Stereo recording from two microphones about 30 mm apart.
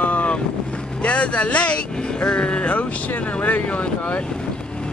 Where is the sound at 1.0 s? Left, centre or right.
Left.